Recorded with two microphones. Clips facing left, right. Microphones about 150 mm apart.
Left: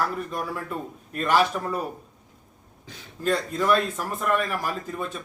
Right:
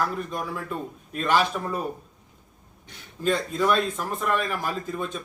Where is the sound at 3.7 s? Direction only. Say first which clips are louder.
Left 2 dB; 5° left (ahead or behind).